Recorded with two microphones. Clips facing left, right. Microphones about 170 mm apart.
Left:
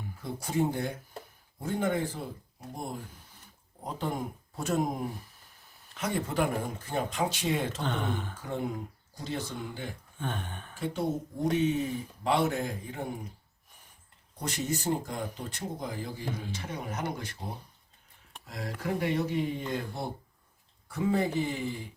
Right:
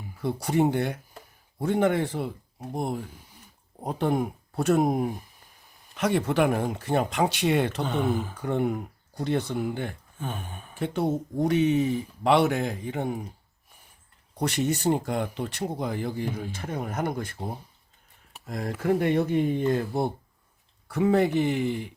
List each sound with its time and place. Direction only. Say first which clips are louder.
0.2 s speech: right 6 dB; 70° right (ahead or behind)
3.8 s speech: right 8 dB; 65° right (ahead or behind)
7.9 s speech: right 6 dB; 10° right (ahead or behind)
8.4 s speech: right 7 dB; 65° right (ahead or behind)
10.2 s a sound: even; 5° right (ahead or behind)
10.8 s speech: right 5 dB; 70° right (ahead or behind)
14.3 s speech: right 7 dB; 70° right (ahead or behind); by 17.3 s 50° right (ahead or behind)
18.4 s speech: right 8 dB; 50° right (ahead or behind)
20.8 s speech: right 6 dB; 70° right (ahead or behind)